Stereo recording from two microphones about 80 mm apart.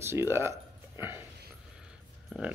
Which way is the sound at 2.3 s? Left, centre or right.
Centre.